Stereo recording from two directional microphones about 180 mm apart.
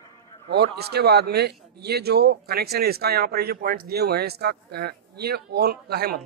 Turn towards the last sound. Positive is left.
turn(degrees=-60)  # may be behind; listen again after turning